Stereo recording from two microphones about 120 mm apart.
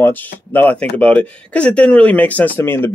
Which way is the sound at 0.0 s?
15° left (ahead or behind).